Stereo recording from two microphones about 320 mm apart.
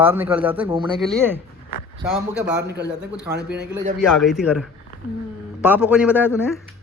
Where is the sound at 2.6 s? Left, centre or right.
Right.